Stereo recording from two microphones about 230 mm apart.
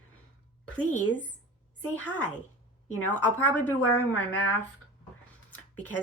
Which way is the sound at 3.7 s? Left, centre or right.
Left.